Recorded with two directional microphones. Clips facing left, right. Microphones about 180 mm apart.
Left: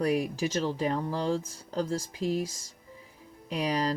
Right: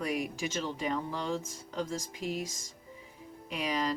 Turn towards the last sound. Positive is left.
turn(degrees=40)  # may be behind; listen again after turning